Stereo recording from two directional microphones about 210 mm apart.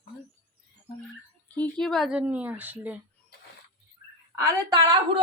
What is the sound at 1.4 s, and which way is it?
A woman's voice, 10° left (ahead or behind).